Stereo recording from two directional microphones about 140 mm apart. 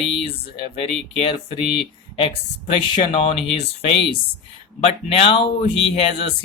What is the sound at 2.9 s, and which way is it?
Speech, 40° left (ahead or behind).